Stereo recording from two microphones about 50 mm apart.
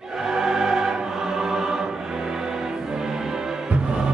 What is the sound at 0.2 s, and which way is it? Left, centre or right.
Choir, centre.